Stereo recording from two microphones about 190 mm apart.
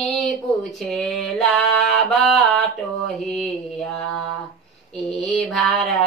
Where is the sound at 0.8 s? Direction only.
Centre (ahead or behind).